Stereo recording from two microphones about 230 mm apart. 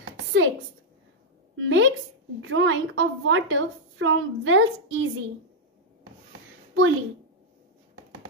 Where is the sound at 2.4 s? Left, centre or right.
Right.